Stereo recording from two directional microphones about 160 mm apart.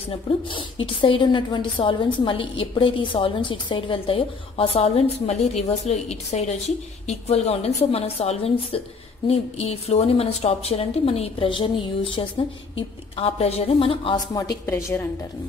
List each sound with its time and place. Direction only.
0.5 s a woman's voice: 30° left (ahead or behind); by 15.0 s 15° left (ahead or behind)